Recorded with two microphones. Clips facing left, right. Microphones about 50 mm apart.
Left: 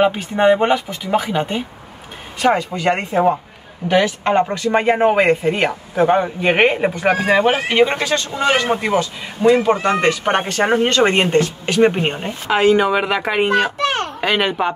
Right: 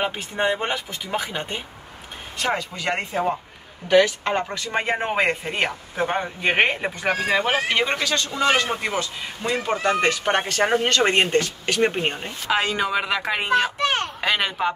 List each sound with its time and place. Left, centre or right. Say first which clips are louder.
0.0 s a man's voice: left 9 dB; centre
4.8 s speech: left 8 dB; centre
7.0 s a man's voice: left 6 dB; left
12.5 s a child's voice: left 9 dB; centre
14.0 s a sound: left 5 dB; centre